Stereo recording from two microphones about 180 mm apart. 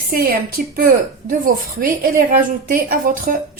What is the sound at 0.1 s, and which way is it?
A woman's voice, 55° right (ahead or behind).